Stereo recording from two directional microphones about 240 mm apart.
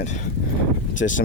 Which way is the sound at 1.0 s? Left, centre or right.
Left.